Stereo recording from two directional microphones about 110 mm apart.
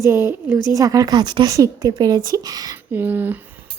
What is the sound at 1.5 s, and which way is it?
A woman's voice, 30° right (ahead or behind).